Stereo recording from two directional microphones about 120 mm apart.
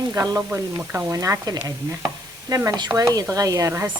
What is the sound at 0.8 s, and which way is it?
A woman's voice, 15° right (ahead or behind).